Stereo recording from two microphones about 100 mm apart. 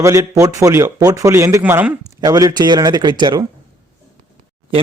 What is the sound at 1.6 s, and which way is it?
Speech, 15° right (ahead or behind).